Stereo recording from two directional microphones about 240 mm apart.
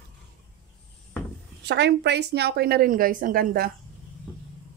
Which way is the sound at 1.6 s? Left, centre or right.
Right.